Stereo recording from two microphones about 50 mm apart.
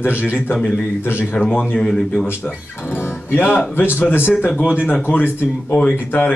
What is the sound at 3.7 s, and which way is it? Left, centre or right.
Speech, left.